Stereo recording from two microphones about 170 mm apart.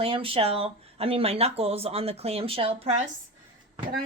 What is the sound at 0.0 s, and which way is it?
Speech, 30° right (ahead or behind).